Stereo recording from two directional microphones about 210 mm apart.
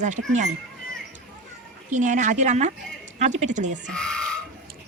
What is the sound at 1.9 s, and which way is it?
Speech, 35° right (ahead or behind).